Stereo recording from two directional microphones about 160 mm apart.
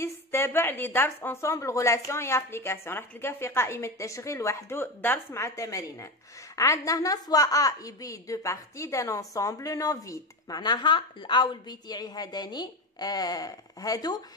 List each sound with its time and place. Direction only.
0.0 s a woman's voice: 15° left (ahead or behind)